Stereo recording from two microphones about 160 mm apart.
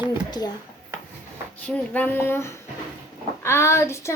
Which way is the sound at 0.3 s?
25° left (ahead or behind).